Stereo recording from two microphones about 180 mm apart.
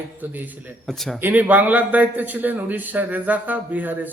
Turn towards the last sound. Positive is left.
turn(degrees=-10)  # may be behind; listen again after turning